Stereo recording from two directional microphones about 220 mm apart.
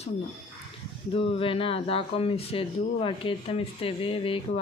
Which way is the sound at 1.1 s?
25° left (ahead or behind).